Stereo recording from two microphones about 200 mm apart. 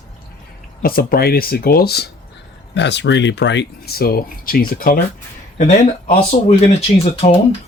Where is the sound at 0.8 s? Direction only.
50° left (ahead or behind).